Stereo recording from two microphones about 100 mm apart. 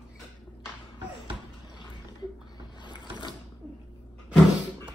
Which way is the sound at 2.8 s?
50° left (ahead or behind).